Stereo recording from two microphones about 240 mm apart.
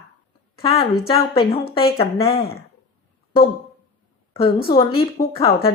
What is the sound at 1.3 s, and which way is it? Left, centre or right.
Speech, left.